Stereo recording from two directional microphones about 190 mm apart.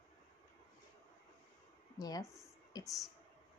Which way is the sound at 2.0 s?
20° left (ahead or behind).